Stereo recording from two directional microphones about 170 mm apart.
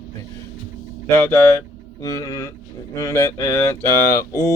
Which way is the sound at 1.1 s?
15° left (ahead or behind).